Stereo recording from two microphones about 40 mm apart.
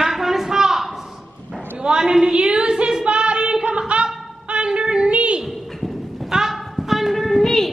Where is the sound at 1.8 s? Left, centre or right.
Right.